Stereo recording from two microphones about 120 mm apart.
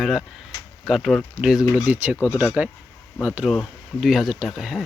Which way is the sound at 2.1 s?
20° left (ahead or behind).